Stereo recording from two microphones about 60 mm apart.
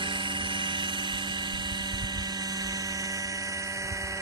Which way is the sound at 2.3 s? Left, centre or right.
Right.